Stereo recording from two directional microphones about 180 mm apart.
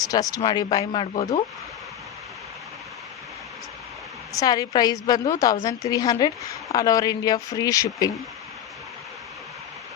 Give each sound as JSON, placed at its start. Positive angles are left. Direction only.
{"t": 0.1, "sound": "speech", "side_deg": 20}
{"t": 1.1, "sound": "speech", "side_deg": 35}
{"t": 4.3, "sound": "speech", "side_deg": 20}